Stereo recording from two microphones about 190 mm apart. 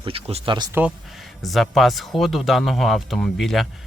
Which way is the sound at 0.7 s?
5° right (ahead or behind).